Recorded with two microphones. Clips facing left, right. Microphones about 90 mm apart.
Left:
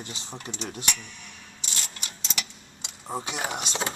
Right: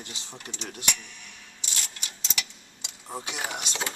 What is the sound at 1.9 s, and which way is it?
Tick-tock, 40° left (ahead or behind).